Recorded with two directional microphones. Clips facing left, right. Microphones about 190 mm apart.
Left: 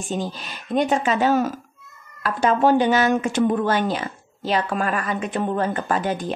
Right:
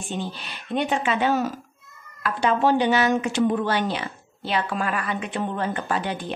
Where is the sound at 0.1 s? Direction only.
40° left (ahead or behind).